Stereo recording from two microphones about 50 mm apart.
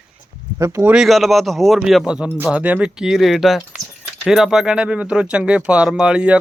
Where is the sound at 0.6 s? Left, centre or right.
Right.